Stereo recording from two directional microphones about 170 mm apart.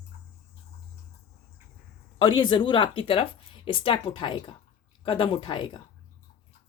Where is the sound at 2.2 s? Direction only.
30° left (ahead or behind).